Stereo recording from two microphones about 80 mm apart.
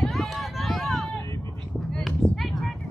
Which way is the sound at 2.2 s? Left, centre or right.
Centre.